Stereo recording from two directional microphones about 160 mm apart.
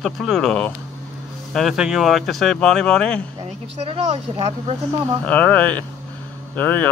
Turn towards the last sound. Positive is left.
turn(degrees=10)  # may be behind; listen again after turning